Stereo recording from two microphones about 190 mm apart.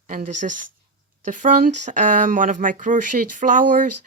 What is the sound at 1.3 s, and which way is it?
Speech, 45° right (ahead or behind).